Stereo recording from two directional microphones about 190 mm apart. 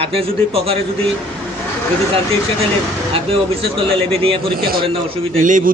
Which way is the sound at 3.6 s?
30° right (ahead or behind).